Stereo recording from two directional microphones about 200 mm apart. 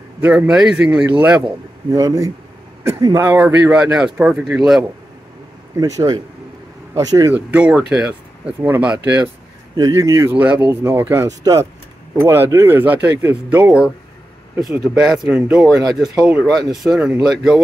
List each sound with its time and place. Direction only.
0.2 s speech: 5° right (ahead or behind)
1.9 s speech: 15° right (ahead or behind); by 4.8 s centre (ahead or behind)
5.8 s speech: 20° right (ahead or behind)